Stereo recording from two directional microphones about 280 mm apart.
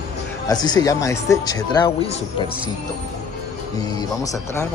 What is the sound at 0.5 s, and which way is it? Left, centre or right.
Speech, centre.